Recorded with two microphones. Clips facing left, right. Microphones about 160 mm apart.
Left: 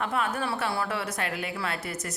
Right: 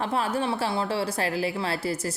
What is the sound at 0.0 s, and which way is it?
A woman's voice, 30° right (ahead or behind).